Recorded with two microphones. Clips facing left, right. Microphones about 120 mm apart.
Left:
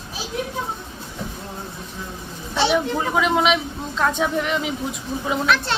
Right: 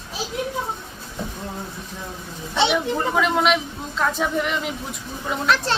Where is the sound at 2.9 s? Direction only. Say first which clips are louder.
Left 1 dB; 5° left (ahead or behind).